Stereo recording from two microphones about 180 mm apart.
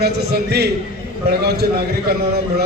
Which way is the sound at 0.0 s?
65° right (ahead or behind).